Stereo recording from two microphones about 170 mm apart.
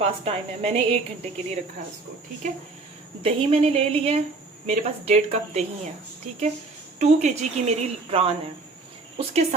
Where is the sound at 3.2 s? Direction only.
35° right (ahead or behind).